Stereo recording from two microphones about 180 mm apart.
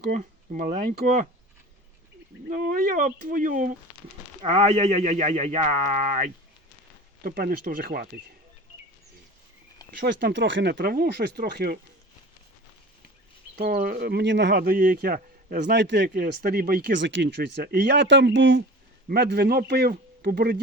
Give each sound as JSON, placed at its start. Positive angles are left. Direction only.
{"t": 0.1, "sound": "speech", "side_deg": -50}
{"t": 2.5, "sound": "speech", "side_deg": -45}
{"t": 7.2, "sound": "speech", "side_deg": -50}
{"t": 10.0, "sound": "speech", "side_deg": -70}
{"t": 13.6, "sound": "speech", "side_deg": -50}
{"t": 16.1, "sound": "speech", "side_deg": -55}
{"t": 19.0, "sound": "speech", "side_deg": -65}